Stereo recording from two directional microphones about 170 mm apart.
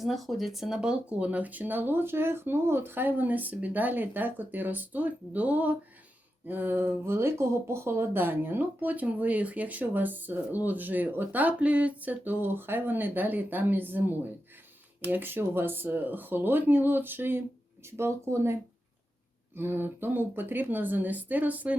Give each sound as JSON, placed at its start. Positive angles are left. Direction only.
{"t": 0.0, "sound": "speech", "side_deg": 0}
{"t": 19.5, "sound": "speech", "side_deg": -15}